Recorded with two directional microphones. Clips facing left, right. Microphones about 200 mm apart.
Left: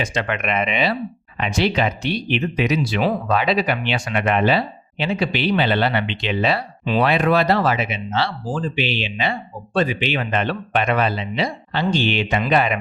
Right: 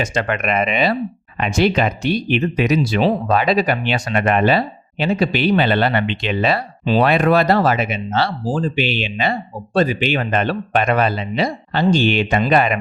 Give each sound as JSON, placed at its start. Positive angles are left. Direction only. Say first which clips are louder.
{"t": 0.0, "sound": "speech", "louder": "right 3 dB", "side_deg": -45}